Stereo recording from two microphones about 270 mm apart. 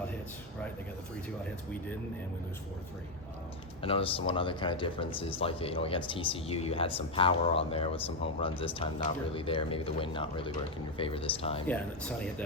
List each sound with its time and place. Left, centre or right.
3.8 s speech: centre
11.7 s speech: centre